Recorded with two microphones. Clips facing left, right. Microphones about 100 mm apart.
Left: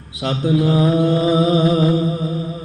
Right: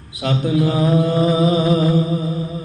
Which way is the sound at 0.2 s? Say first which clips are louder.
Even; 30° left (ahead or behind).